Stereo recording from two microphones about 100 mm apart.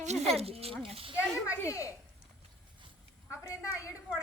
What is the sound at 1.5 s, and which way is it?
Speech, 30° left (ahead or behind).